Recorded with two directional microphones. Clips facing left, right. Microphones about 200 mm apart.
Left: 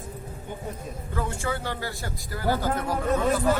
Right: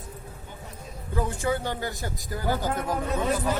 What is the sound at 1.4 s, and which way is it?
Speech, 20° right (ahead or behind).